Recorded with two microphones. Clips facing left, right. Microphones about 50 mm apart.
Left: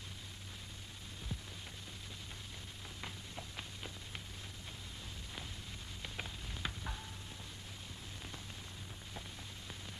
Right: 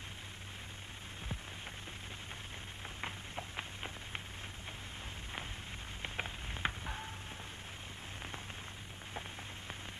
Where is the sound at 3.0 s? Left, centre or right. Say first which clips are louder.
Right 5 dB; right.